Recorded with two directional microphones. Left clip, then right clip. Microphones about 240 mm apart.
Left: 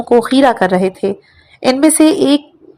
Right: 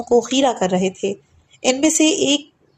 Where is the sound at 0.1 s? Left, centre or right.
Centre.